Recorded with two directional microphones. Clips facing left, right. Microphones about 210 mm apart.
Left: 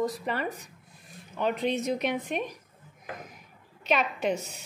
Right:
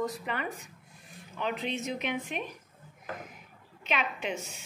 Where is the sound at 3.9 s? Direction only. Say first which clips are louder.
Left 6 dB; 40° left (ahead or behind).